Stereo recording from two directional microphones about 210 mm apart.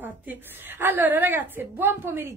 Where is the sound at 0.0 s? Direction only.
10° right (ahead or behind).